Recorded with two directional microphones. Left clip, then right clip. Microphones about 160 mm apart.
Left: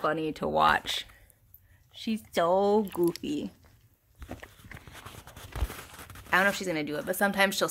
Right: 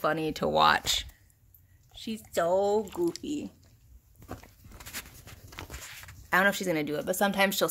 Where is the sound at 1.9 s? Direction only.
45° left (ahead or behind).